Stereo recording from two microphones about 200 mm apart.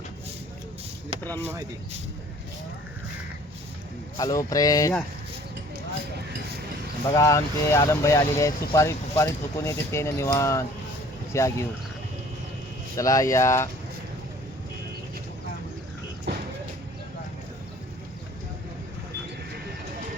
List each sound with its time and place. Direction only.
4.2 s speech: 15° left (ahead or behind)
7.1 s speech: 15° left (ahead or behind)
13.0 s speech: 15° left (ahead or behind)
16.3 s music: 60° right (ahead or behind)